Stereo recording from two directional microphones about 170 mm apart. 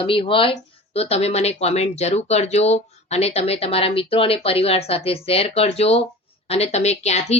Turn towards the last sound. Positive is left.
turn(degrees=40)  # may be behind; listen again after turning